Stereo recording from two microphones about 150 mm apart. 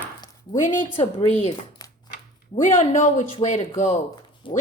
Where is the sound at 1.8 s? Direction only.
25° left (ahead or behind).